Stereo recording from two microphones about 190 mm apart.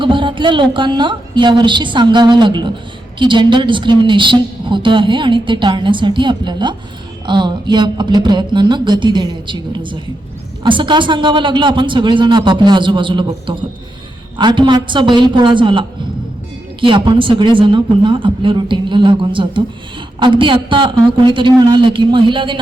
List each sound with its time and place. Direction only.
0.0 s a woman's voice: 25° right (ahead or behind)